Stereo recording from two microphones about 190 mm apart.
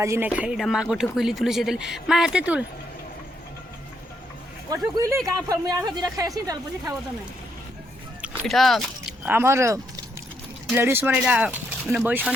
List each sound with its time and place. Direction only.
0.0 s speech: 10° right (ahead or behind)
4.9 s speech: 15° right (ahead or behind)
8.2 s speech: centre (ahead or behind)